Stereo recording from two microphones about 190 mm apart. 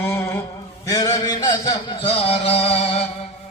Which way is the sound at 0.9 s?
20° left (ahead or behind).